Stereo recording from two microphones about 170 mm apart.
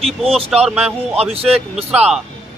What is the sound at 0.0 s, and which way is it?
Speech, centre (ahead or behind).